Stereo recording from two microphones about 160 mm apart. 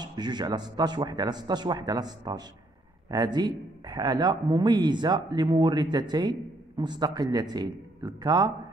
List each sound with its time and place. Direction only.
0.0 s speech: 25° right (ahead or behind)